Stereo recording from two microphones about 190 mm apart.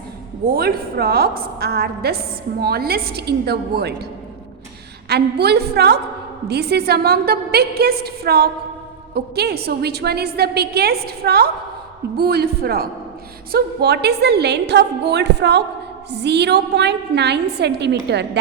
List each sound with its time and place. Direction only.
0.4 s a woman's voice: 55° right (ahead or behind)
5.0 s a woman's voice: 60° right (ahead or behind)